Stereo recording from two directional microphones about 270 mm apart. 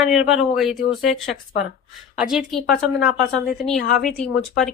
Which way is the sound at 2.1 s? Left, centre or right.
Centre.